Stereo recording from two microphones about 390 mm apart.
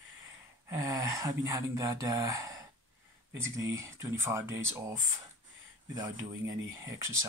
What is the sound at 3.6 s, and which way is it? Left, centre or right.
Speech, centre.